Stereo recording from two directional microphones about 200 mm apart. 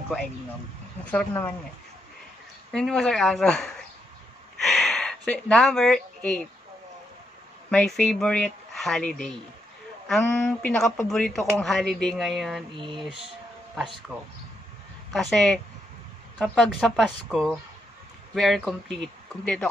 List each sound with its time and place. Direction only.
1.0 s speech: 10° left (ahead or behind)
2.7 s speech: 5° left (ahead or behind)
4.6 s a sound: centre (ahead or behind)
7.7 s speech: 5° left (ahead or behind)
12.7 s a sound: 25° right (ahead or behind)
13.0 s speech: centre (ahead or behind)
15.1 s speech: centre (ahead or behind)